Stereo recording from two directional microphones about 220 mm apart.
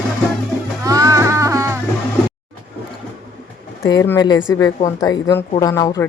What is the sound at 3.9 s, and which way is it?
Speech, 15° left (ahead or behind).